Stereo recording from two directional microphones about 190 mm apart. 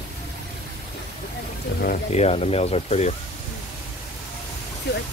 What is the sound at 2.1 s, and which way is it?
Speech, 35° left (ahead or behind).